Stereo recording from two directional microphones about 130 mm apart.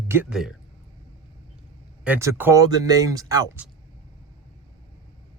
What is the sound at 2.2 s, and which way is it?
Speech, 20° right (ahead or behind).